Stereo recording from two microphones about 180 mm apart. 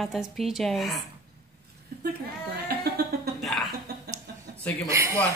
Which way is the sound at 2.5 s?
60° right (ahead or behind).